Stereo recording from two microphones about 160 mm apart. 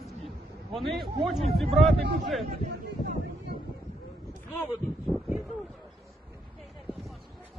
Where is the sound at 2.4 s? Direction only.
70° right (ahead or behind).